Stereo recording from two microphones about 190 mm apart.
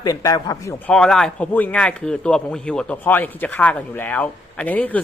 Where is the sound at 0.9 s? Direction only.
5° left (ahead or behind).